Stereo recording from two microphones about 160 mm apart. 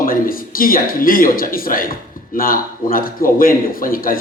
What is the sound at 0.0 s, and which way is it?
Speech, 60° left (ahead or behind).